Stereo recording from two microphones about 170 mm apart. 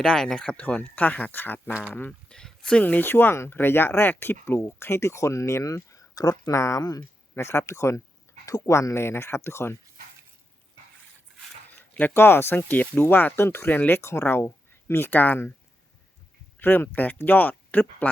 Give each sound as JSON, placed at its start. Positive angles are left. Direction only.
{"t": 0.0, "sound": "speech", "side_deg": 5}
{"t": 11.8, "sound": "speech", "side_deg": 10}
{"t": 16.6, "sound": "speech", "side_deg": 10}